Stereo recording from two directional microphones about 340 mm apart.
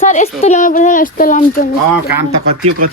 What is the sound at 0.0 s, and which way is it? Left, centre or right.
Speech, left.